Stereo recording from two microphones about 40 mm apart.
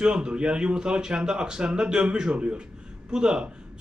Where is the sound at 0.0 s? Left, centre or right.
Right.